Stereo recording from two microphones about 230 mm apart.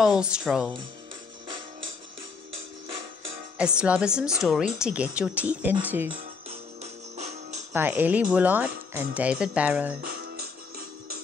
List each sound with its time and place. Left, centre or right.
0.0 s a woman's voice: centre
3.5 s a woman's voice: centre
6.8 s music: right
7.7 s speech: centre